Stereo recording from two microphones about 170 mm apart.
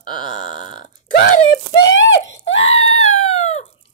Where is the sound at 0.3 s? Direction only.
45° left (ahead or behind).